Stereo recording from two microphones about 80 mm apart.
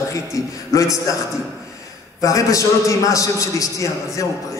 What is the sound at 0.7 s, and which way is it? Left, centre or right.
Music, left.